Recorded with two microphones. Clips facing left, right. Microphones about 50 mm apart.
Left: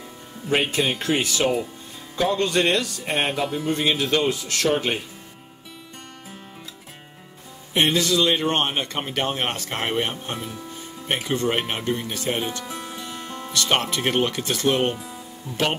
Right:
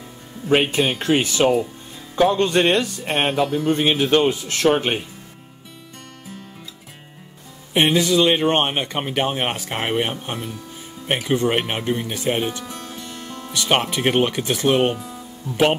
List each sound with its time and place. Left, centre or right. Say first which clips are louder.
0.5 s speech: right 4 dB; right
7.7 s speech: right 3 dB; centre
12.6 s music: even; centre
13.5 s speech: right 2 dB; centre